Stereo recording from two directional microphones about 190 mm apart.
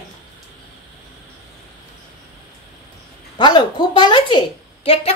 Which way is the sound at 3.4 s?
25° left (ahead or behind).